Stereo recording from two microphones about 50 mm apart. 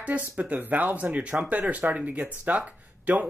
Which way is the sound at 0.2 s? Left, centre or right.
Right.